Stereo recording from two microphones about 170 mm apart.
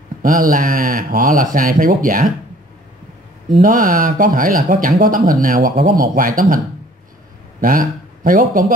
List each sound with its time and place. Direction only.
0.2 s speech: 55° right (ahead or behind)
3.6 s speech: 55° right (ahead or behind)
7.6 s speech: 55° right (ahead or behind)